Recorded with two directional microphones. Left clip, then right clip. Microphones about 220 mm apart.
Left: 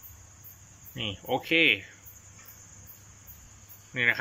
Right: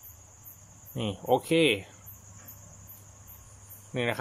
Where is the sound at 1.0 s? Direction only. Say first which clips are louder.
Right 4 dB; 20° right (ahead or behind).